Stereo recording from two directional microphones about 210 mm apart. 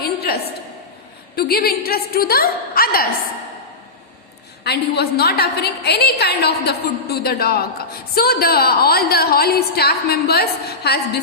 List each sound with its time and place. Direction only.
0.0 s a sound: 50° left (ahead or behind)
1.4 s a woman's voice: 45° left (ahead or behind)
4.6 s a woman's voice: 50° left (ahead or behind)